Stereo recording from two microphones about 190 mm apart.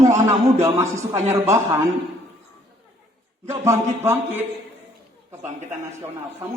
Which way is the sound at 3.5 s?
15° right (ahead or behind).